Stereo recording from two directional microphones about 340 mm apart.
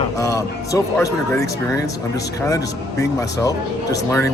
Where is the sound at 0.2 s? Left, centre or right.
Centre.